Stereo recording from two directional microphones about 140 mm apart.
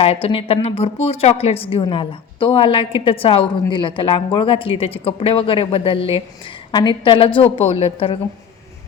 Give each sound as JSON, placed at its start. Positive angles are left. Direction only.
{"t": 0.0, "sound": "a woman's voice", "side_deg": 40}